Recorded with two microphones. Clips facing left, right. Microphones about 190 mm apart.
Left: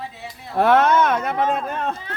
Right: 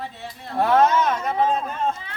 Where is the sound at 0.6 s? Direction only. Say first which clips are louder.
Left 2 dB; 65° left (ahead or behind).